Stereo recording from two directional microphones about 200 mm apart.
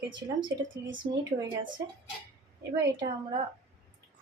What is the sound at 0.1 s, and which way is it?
Speech, 20° right (ahead or behind).